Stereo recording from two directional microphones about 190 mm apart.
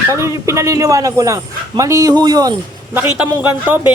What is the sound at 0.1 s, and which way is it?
A man's voice, 15° right (ahead or behind).